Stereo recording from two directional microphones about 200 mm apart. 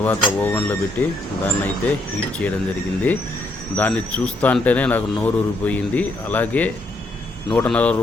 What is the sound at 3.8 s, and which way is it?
Speech, 10° left (ahead or behind).